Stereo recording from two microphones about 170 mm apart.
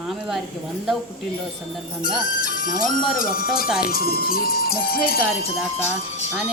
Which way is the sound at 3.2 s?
60° left (ahead or behind).